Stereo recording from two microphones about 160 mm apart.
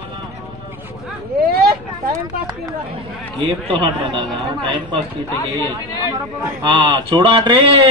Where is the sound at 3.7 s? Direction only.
30° right (ahead or behind).